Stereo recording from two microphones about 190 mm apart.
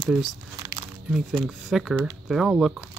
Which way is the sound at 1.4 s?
Centre (ahead or behind).